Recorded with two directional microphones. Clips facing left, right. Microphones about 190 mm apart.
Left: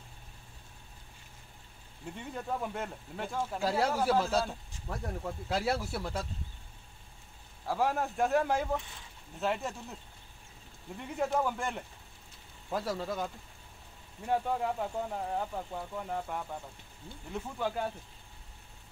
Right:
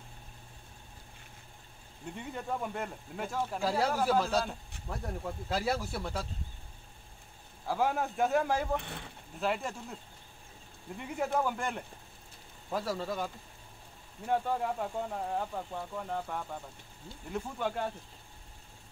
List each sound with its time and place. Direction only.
2.0 s speech: centre (ahead or behind)
7.6 s speech: centre (ahead or behind)
8.8 s speech: 65° right (ahead or behind)
9.4 s speech: centre (ahead or behind)
11.0 s speech: 5° right (ahead or behind)